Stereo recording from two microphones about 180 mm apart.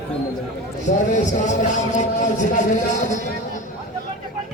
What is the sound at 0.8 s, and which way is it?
A man's voice, 45° left (ahead or behind).